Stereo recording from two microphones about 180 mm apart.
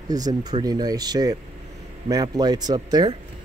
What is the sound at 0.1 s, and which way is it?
Speech, 20° right (ahead or behind).